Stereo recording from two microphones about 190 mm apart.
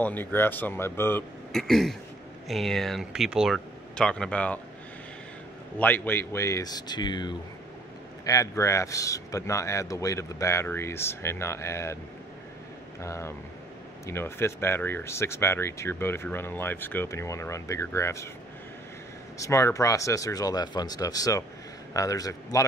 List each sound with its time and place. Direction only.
0.0 s speech: 10° left (ahead or behind)
1.5 s speech: centre (ahead or behind)
5.8 s speech: 10° left (ahead or behind)
13.0 s speech: 15° left (ahead or behind)
19.3 s a man's voice: 15° left (ahead or behind)